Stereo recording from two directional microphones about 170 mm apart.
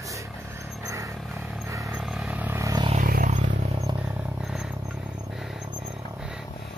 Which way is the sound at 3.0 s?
55° right (ahead or behind).